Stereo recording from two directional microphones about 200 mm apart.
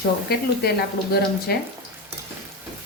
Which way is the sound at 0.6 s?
55° left (ahead or behind).